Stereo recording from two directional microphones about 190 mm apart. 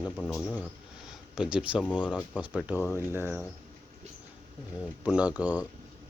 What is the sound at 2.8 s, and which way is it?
Speech, 10° left (ahead or behind).